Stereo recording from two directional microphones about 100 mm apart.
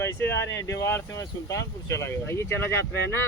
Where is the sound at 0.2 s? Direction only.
25° left (ahead or behind).